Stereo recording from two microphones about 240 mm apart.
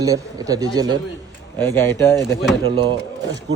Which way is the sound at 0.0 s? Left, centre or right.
Centre.